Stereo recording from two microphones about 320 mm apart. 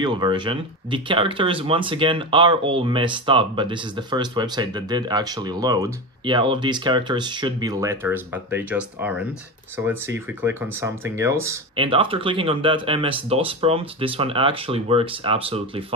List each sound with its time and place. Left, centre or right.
0.0 s speech: centre